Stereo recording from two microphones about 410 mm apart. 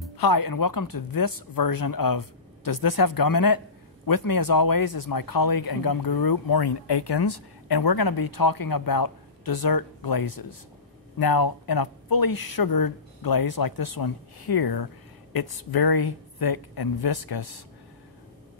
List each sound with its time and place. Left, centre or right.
0.2 s a man's voice: left